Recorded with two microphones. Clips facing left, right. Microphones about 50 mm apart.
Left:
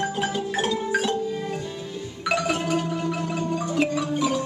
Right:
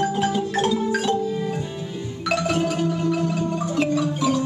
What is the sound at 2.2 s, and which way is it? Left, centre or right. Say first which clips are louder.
Marimba: right 2 dB; centre.